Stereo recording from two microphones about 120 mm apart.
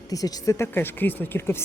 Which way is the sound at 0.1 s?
30° left (ahead or behind).